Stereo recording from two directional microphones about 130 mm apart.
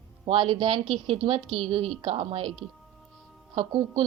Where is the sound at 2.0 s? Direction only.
45° right (ahead or behind).